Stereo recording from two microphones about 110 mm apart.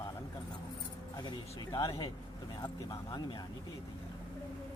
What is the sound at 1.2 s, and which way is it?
Speech, 40° left (ahead or behind).